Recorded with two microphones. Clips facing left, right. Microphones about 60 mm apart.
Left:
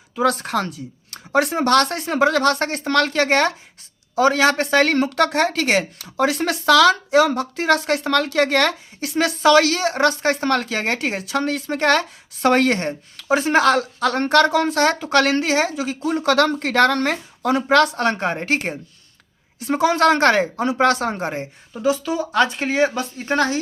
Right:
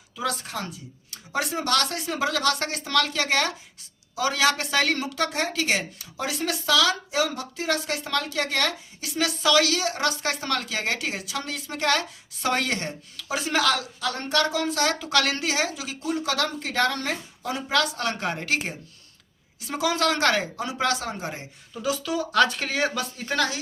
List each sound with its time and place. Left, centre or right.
0.2 s speech: left